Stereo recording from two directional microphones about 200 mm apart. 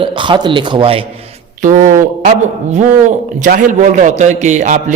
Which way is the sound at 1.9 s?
40° right (ahead or behind).